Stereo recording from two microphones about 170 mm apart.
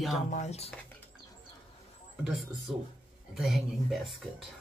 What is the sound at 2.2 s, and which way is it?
Speech, centre (ahead or behind).